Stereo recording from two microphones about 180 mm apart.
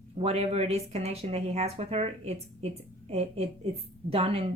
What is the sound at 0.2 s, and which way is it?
Speech, 35° right (ahead or behind).